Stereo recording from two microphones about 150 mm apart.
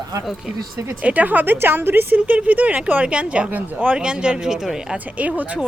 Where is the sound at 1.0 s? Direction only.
10° right (ahead or behind).